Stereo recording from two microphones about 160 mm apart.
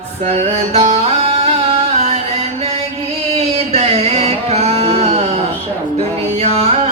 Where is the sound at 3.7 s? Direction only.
40° right (ahead or behind).